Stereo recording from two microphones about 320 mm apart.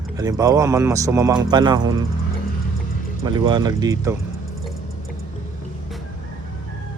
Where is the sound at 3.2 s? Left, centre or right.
Centre.